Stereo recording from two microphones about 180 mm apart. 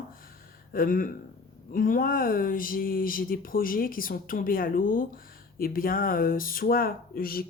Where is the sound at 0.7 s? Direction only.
50° left (ahead or behind).